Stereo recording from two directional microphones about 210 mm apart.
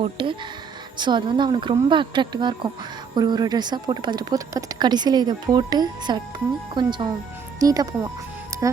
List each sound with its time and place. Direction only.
0.0 s speech: 25° right (ahead or behind)